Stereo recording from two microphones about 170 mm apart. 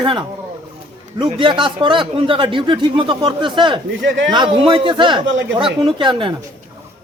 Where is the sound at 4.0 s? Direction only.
90° right.